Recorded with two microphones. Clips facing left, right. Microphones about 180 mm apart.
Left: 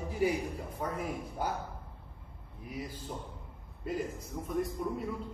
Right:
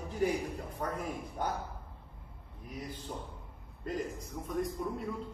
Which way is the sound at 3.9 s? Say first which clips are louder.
Left 1 dB; 5° left (ahead or behind).